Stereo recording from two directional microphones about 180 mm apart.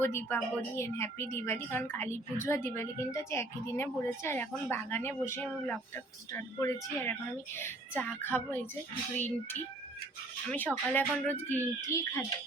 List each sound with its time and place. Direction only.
0.0 s a woman's voice: 15° left (ahead or behind)